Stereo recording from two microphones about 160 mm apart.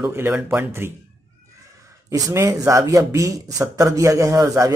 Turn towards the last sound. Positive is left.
turn(degrees=-20)  # may be behind; listen again after turning